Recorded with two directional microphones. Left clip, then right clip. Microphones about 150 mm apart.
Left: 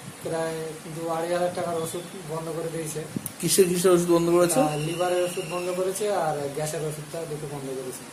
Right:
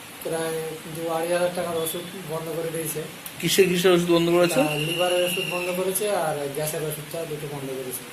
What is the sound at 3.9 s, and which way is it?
Speech, 20° left (ahead or behind).